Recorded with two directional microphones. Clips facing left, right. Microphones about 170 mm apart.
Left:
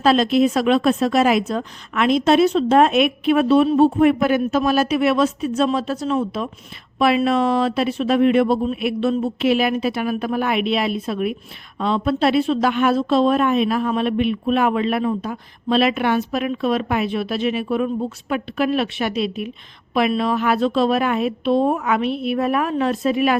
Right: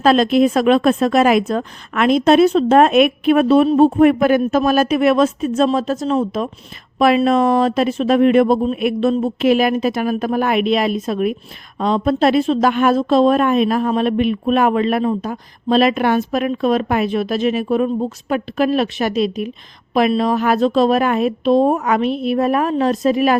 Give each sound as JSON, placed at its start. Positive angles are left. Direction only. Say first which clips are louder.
{"t": 0.0, "sound": "a woman's voice", "louder": "right 3 dB", "side_deg": -50}